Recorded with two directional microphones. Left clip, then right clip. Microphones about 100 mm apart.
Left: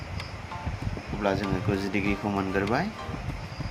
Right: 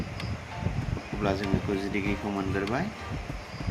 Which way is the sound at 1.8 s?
50° left (ahead or behind).